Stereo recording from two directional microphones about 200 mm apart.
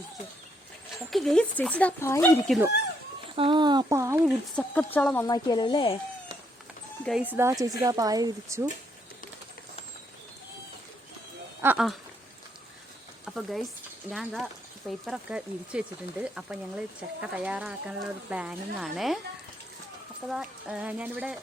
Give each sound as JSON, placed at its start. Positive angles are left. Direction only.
{"t": 1.1, "sound": "speech", "side_deg": 0}
{"t": 3.3, "sound": "speech", "side_deg": -25}
{"t": 4.5, "sound": "speech", "side_deg": 5}
{"t": 5.2, "sound": "speech", "side_deg": 20}
{"t": 7.0, "sound": "speech", "side_deg": -5}
{"t": 11.6, "sound": "speech", "side_deg": -5}
{"t": 13.2, "sound": "speech", "side_deg": 0}
{"t": 20.2, "sound": "speech", "side_deg": -5}